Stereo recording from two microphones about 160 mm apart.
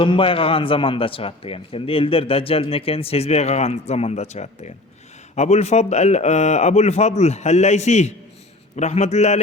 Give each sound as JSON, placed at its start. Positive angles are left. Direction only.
{"t": 0.0, "sound": "a man's voice", "side_deg": 30}